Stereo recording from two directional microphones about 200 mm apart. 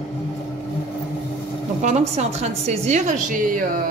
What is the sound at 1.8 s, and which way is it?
A woman's voice, 35° right (ahead or behind).